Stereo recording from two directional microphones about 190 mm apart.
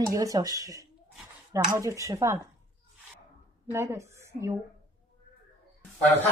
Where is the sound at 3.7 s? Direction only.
15° right (ahead or behind).